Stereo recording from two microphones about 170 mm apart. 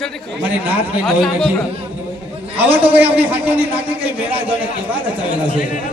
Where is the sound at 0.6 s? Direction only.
10° right (ahead or behind).